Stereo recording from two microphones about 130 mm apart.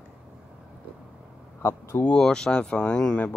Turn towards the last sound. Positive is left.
turn(degrees=5)  # may be behind; listen again after turning